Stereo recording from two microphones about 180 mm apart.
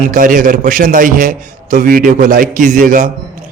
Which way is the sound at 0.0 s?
50° right (ahead or behind).